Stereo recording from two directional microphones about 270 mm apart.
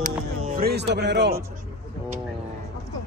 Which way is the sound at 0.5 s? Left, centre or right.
Right.